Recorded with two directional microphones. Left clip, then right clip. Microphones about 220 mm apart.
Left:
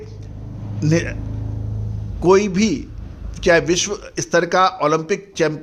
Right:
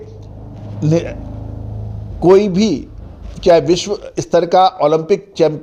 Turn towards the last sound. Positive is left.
turn(degrees=-5)  # may be behind; listen again after turning